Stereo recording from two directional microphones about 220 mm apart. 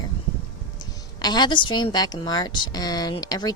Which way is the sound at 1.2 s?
20° left (ahead or behind).